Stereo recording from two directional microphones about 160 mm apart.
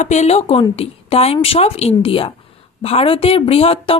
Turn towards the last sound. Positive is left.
turn(degrees=35)  # may be behind; listen again after turning